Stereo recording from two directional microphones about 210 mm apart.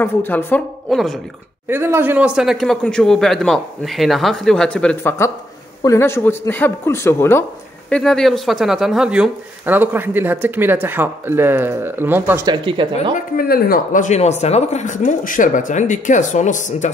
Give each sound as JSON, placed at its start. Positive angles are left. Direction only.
{"t": 0.0, "sound": "a man's voice", "side_deg": 10}
{"t": 1.7, "sound": "a man's voice", "side_deg": -10}
{"t": 12.6, "sound": "speech", "side_deg": -25}
{"t": 13.1, "sound": "speech", "side_deg": 45}